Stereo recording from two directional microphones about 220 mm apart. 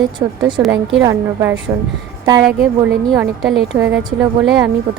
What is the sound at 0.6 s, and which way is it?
Speech, centre (ahead or behind).